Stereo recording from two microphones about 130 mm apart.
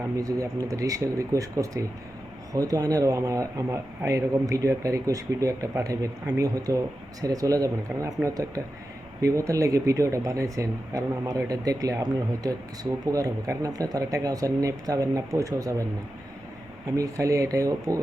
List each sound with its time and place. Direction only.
0.2 s speech: 25° right (ahead or behind)
17.0 s speech: 25° right (ahead or behind)